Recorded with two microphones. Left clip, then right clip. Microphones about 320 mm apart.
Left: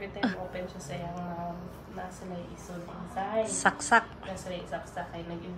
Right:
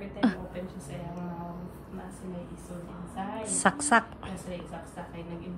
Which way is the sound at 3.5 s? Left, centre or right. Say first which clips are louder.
Right 2 dB; centre.